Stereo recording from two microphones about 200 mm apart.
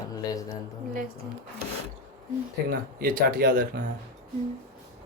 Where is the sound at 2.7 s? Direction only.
50° right (ahead or behind).